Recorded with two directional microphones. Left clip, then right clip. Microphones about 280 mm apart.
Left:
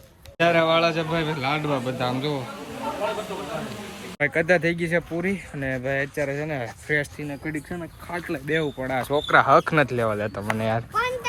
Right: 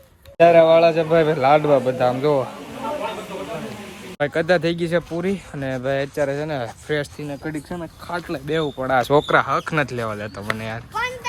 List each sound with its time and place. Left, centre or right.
0.3 s a man's voice: centre
4.2 s speech: centre
9.2 s a man's voice: centre